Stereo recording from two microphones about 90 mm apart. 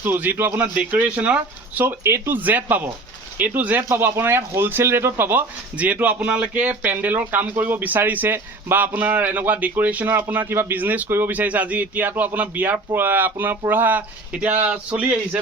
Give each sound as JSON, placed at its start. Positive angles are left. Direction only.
{"t": 0.0, "sound": "speech", "side_deg": -20}
{"t": 2.0, "sound": "speech", "side_deg": -25}